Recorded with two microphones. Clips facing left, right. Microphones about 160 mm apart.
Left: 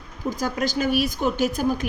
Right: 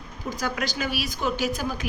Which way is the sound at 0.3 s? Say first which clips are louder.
Left 4 dB; 45° left (ahead or behind).